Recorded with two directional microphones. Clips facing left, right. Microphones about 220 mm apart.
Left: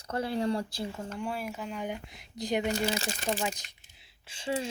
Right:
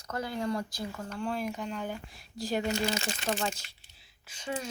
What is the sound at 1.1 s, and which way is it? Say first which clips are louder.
Speech: right 2 dB; 10° left (ahead or behind).